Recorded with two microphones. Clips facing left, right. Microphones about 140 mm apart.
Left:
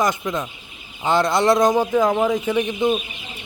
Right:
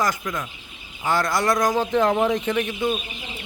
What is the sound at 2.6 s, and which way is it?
Speech, 20° left (ahead or behind).